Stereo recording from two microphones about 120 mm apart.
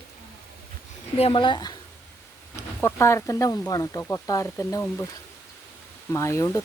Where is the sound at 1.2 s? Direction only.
45° left (ahead or behind).